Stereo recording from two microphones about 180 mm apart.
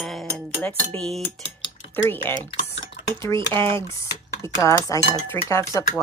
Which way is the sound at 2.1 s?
10° left (ahead or behind).